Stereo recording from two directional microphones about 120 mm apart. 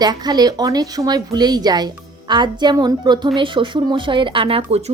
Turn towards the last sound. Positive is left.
turn(degrees=-50)  # may be behind; listen again after turning